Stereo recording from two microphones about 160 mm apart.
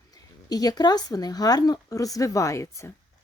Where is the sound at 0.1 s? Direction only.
25° left (ahead or behind).